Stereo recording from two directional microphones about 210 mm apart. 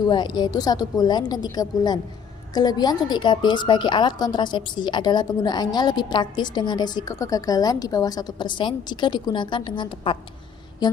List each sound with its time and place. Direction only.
0.1 s a woman's voice: 20° left (ahead or behind)